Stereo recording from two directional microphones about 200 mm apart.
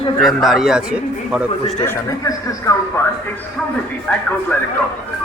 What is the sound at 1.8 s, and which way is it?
Speech, 15° left (ahead or behind).